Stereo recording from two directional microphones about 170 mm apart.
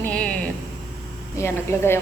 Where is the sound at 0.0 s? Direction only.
5° left (ahead or behind).